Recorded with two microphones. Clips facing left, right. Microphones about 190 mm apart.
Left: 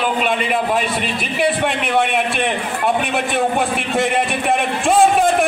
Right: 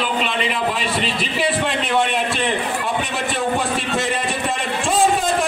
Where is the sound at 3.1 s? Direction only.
60° left (ahead or behind).